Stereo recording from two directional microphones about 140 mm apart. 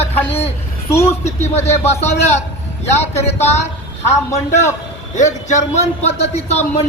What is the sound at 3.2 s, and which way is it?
Speech, 50° left (ahead or behind).